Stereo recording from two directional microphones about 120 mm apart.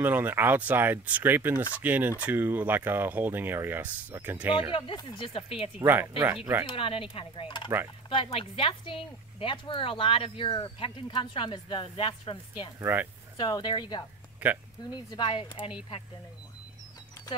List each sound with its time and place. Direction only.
0.0 s speech: 15° right (ahead or behind)
4.9 s a woman's voice: 45° left (ahead or behind)
5.8 s speech: 20° right (ahead or behind)
6.6 s a woman's voice: 45° left (ahead or behind)
12.7 s speech: 15° right (ahead or behind)
13.4 s speech: 40° left (ahead or behind)
14.4 s speech: 10° right (ahead or behind)
15.0 s speech: 40° left (ahead or behind)